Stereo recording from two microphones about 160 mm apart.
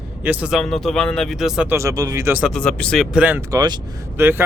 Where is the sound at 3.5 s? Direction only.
25° right (ahead or behind).